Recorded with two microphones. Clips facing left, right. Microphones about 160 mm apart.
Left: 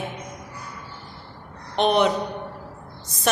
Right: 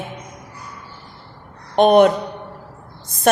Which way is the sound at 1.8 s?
50° right (ahead or behind).